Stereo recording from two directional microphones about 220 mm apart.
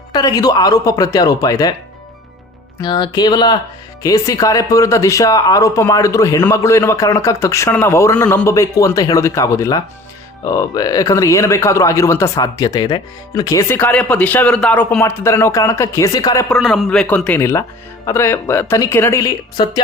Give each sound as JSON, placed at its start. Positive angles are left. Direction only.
{"t": 0.1, "sound": "speech", "side_deg": 15}
{"t": 2.8, "sound": "speech", "side_deg": 20}
{"t": 16.5, "sound": "speech", "side_deg": 0}